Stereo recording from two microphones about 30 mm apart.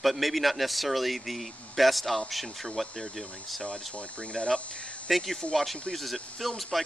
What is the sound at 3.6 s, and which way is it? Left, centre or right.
Speech, left.